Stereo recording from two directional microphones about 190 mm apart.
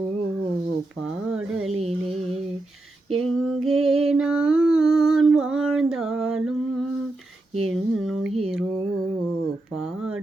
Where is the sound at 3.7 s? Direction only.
Centre (ahead or behind).